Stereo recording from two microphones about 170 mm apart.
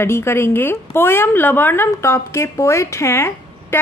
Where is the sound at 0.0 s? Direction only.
15° left (ahead or behind).